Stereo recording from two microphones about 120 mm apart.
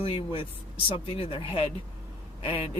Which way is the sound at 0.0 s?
50° left (ahead or behind).